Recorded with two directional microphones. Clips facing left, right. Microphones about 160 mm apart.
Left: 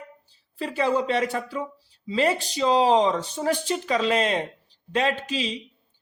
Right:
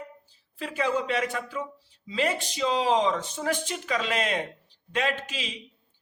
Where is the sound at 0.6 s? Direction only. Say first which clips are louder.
Left 4 dB; 35° left (ahead or behind).